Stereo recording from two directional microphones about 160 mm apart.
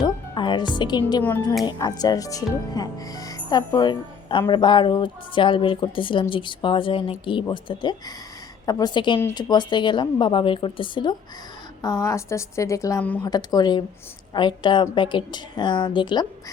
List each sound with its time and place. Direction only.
0.0 s music: 30° left (ahead or behind)
1.6 s speech: 25° left (ahead or behind)